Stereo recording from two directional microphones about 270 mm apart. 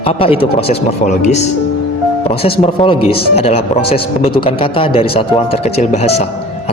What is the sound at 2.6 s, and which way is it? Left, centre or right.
Speech, centre.